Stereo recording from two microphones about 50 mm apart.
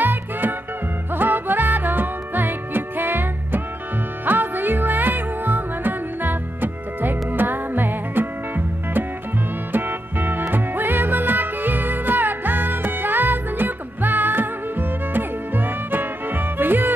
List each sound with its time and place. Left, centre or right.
0.0 s music: right